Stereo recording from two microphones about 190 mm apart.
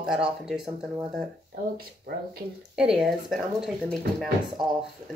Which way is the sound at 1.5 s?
50° right (ahead or behind).